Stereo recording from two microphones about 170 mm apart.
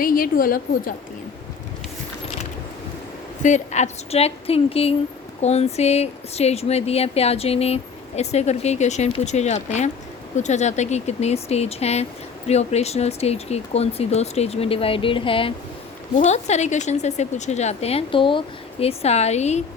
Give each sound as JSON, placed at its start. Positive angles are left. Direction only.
{"t": 0.0, "sound": "a woman's voice", "side_deg": 55}
{"t": 3.4, "sound": "speech", "side_deg": 45}
{"t": 16.1, "sound": "speech", "side_deg": 45}